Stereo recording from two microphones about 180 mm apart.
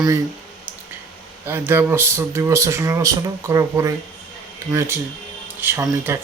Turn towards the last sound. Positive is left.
turn(degrees=-15)  # may be behind; listen again after turning